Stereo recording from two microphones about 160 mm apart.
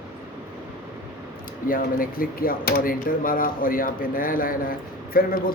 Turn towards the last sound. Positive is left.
turn(degrees=65)  # may be behind; listen again after turning